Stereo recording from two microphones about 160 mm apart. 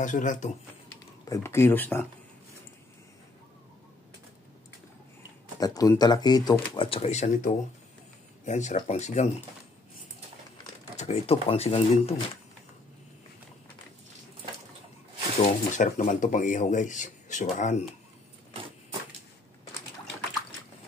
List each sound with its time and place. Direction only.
0.0 s speech: 50° left (ahead or behind)
1.2 s speech: 20° left (ahead or behind)
5.6 s speech: 20° left (ahead or behind)
6.8 s speech: 40° left (ahead or behind)
11.0 s speech: 40° left (ahead or behind)
15.4 s speech: 50° left (ahead or behind)